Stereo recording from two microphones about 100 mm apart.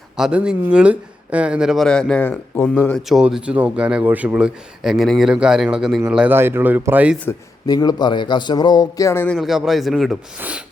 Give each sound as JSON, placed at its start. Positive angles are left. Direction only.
{"t": 0.2, "sound": "speech", "side_deg": -10}
{"t": 3.1, "sound": "speech", "side_deg": -5}
{"t": 6.3, "sound": "speech", "side_deg": -25}
{"t": 7.7, "sound": "a man's voice", "side_deg": 40}
{"t": 9.4, "sound": "speech", "side_deg": -5}